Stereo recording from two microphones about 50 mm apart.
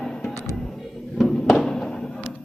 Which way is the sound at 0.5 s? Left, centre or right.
Centre.